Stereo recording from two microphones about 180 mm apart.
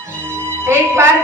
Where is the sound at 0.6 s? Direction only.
15° right (ahead or behind).